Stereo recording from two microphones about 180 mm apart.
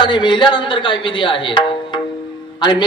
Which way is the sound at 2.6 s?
25° left (ahead or behind).